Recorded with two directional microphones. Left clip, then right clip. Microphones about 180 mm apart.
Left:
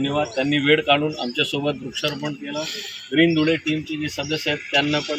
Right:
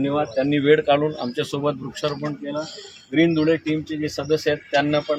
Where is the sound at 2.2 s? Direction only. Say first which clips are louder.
Even; centre (ahead or behind).